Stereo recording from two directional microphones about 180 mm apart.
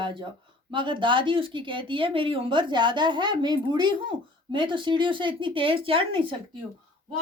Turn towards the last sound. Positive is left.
turn(degrees=-30)  # may be behind; listen again after turning